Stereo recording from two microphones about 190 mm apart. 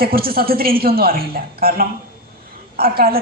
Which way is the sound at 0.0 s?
50° right (ahead or behind).